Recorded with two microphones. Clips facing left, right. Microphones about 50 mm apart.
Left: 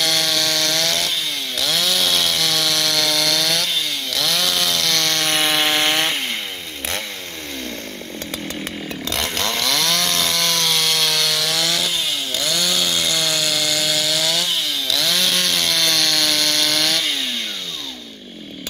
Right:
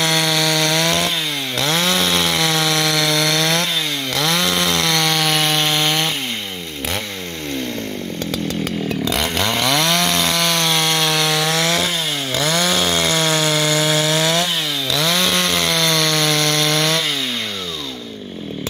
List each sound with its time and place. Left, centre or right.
0.0 s chainsaw: right
5.1 s wood: centre
5.7 s chainsaw: centre
9.0 s chainsaw: centre
9.5 s chainsaw: right
14.9 s chainsaw: right